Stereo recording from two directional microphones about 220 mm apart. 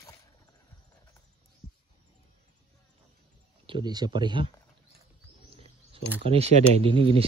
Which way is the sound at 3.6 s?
20° right (ahead or behind).